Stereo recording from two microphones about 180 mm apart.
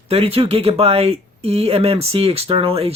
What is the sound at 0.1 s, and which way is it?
Speech, 35° right (ahead or behind).